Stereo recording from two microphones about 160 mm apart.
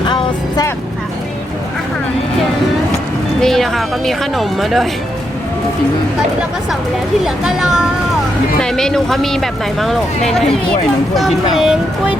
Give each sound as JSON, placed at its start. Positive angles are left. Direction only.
{"t": 0.1, "sound": "vehicle", "side_deg": 25}
{"t": 3.4, "sound": "speech", "side_deg": 0}
{"t": 7.3, "sound": "speech", "side_deg": -5}